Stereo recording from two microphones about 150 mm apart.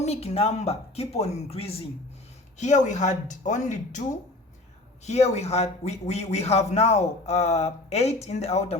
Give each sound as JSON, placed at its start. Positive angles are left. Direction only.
{"t": 0.0, "sound": "a man's voice", "side_deg": 45}
{"t": 2.6, "sound": "a man's voice", "side_deg": 55}
{"t": 5.0, "sound": "a man's voice", "side_deg": 50}